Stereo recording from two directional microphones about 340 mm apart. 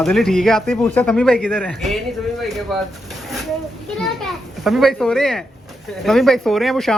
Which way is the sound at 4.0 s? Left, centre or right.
Centre.